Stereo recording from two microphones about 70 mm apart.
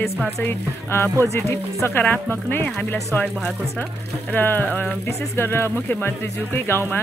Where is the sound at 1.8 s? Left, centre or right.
Left.